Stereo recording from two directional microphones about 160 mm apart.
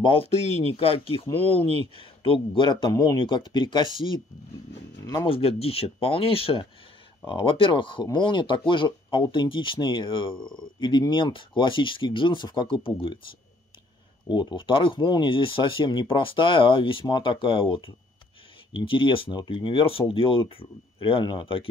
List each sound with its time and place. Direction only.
0.0 s speech: 35° left (ahead or behind)
5.2 s speech: 35° left (ahead or behind)
14.3 s speech: 25° left (ahead or behind)